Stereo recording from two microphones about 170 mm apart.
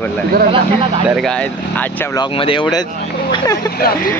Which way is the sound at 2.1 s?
30° left (ahead or behind).